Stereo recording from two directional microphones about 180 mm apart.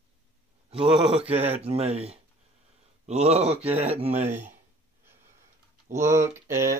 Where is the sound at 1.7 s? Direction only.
35° right (ahead or behind).